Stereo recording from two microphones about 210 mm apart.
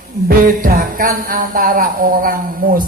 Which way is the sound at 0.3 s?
45° right (ahead or behind).